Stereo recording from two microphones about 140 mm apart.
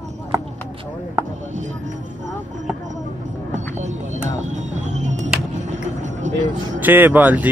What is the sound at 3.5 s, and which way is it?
Speech, 55° right (ahead or behind).